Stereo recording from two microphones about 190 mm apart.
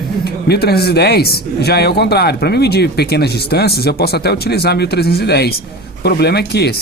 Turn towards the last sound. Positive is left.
turn(degrees=60)  # may be behind; listen again after turning